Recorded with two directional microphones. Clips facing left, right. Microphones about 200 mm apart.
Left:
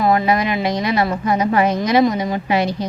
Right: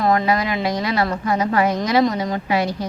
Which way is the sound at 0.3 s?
20° left (ahead or behind).